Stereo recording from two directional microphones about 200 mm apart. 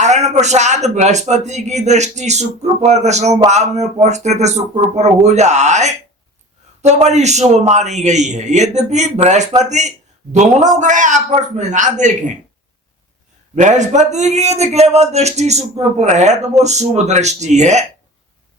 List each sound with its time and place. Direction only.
0.0 s a man's voice: 35° right (ahead or behind)
13.6 s a man's voice: 35° right (ahead or behind)